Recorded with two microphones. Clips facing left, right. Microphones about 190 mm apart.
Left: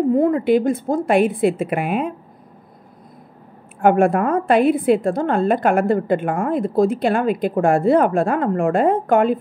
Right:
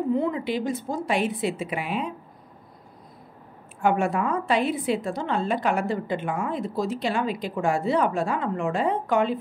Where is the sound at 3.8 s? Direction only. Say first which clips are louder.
Left 8 dB; 55° left (ahead or behind).